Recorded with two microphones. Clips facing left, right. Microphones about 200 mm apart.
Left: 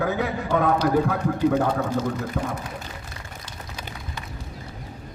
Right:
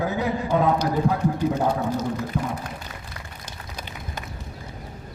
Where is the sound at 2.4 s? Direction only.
60° left (ahead or behind).